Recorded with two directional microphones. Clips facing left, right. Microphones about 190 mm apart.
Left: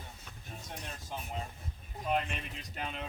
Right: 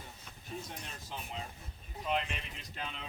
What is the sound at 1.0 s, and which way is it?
Speech, 45° left (ahead or behind).